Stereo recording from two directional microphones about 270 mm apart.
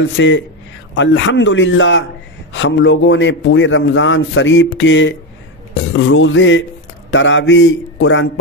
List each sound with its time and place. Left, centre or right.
0.0 s a man's voice: left